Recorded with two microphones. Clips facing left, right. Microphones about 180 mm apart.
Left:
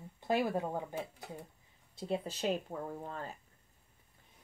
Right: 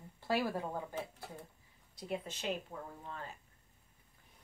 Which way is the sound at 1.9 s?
30° left (ahead or behind).